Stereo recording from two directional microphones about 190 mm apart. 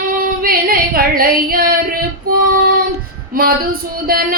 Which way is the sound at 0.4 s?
50° right (ahead or behind).